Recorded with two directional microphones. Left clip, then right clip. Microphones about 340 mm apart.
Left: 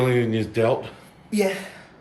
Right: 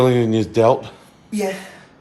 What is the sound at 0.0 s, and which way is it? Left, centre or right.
Speech, centre.